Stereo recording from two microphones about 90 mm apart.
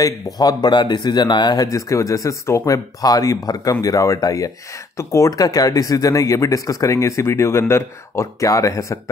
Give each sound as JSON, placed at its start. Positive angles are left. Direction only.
{"t": 0.0, "sound": "speech", "side_deg": 45}
{"t": 1.9, "sound": "speech", "side_deg": 35}